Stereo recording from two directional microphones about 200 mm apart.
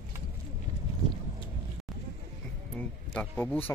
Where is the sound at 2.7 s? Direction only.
5° left (ahead or behind).